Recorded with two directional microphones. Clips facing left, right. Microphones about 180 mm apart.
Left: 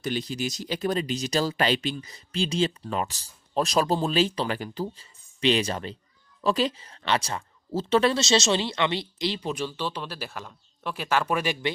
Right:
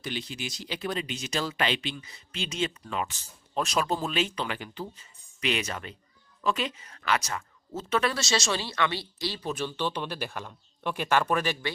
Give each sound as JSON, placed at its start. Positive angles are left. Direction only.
{"t": 0.0, "sound": "speech", "side_deg": 40}